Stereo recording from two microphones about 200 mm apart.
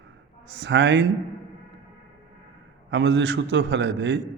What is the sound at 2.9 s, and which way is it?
A man's voice, 60° right (ahead or behind).